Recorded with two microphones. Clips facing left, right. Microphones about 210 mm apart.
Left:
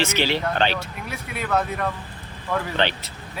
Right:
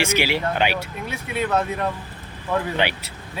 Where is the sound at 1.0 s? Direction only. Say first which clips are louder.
Right 8 dB; 25° right (ahead or behind).